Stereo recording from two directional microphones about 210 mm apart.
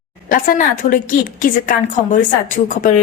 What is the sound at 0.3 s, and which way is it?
A woman's voice, 40° left (ahead or behind).